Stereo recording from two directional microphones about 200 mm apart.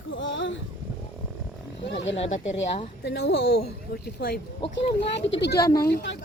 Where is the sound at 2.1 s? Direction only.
30° left (ahead or behind).